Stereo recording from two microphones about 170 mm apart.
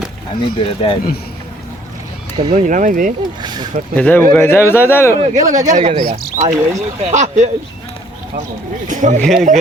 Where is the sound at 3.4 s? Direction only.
25° right (ahead or behind).